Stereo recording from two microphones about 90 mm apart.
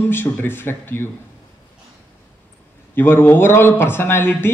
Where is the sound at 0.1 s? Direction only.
25° left (ahead or behind).